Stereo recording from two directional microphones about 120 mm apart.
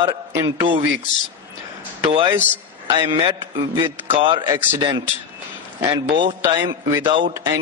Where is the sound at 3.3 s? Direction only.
25° right (ahead or behind).